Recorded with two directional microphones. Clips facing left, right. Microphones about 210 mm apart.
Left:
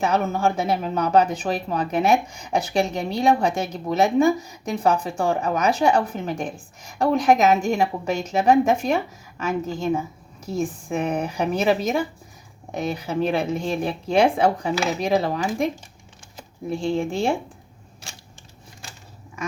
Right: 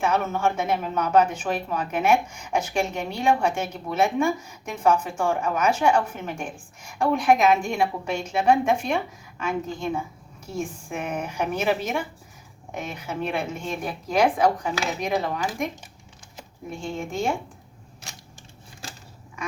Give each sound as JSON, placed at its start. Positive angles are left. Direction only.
{"t": 0.0, "sound": "speech", "side_deg": 35}